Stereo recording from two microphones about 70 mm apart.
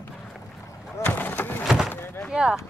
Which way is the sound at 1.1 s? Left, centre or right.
Left.